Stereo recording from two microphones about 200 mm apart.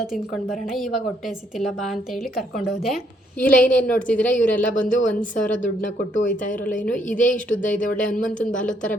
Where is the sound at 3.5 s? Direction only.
40° left (ahead or behind).